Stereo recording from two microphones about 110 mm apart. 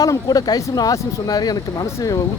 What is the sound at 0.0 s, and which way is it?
Speech, 35° left (ahead or behind).